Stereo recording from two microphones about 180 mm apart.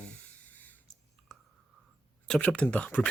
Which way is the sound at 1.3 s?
5° left (ahead or behind).